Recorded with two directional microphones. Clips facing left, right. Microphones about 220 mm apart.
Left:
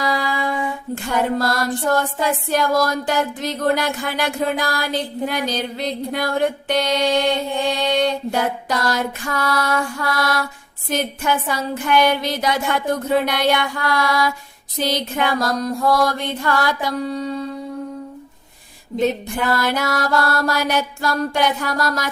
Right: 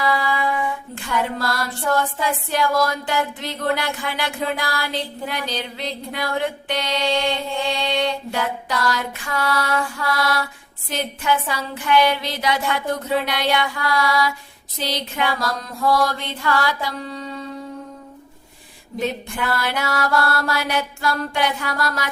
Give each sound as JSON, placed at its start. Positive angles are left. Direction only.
{"t": 0.0, "sound": "music", "side_deg": 40}
{"t": 1.1, "sound": "a sound", "side_deg": 45}
{"t": 19.4, "sound": "mantra", "side_deg": 40}